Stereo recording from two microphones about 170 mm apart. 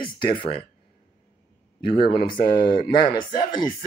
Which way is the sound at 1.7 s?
30° left (ahead or behind).